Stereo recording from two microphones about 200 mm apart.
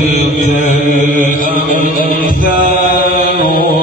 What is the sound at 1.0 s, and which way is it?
Mantra, 40° right (ahead or behind).